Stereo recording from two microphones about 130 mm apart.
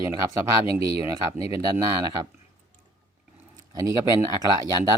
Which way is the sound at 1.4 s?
45° left (ahead or behind).